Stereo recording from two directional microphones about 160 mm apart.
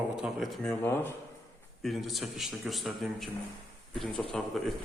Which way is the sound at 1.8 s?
Centre (ahead or behind).